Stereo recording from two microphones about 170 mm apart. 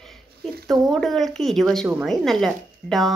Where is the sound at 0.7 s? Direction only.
Centre (ahead or behind).